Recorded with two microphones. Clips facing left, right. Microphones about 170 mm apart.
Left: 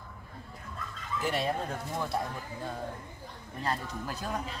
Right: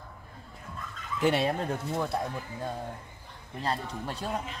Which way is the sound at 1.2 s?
70° right (ahead or behind).